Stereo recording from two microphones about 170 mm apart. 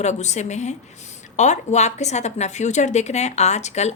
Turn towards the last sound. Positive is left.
turn(degrees=40)  # may be behind; listen again after turning